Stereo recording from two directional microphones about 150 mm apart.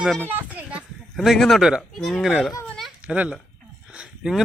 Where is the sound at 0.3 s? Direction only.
10° right (ahead or behind).